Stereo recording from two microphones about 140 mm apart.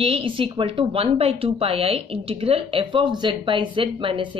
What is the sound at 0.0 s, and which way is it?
A woman's voice, 40° right (ahead or behind).